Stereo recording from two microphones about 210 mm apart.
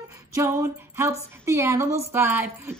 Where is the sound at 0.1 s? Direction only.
15° right (ahead or behind).